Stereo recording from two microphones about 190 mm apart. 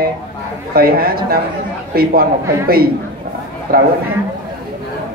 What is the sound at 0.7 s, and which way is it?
Speech, 50° right (ahead or behind).